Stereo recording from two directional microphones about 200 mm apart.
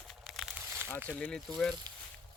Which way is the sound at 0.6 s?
15° right (ahead or behind).